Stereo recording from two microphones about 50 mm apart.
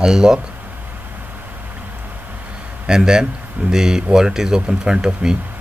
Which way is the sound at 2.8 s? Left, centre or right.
Centre.